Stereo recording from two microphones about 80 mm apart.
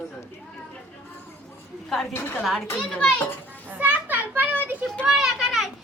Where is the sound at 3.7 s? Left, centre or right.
Right.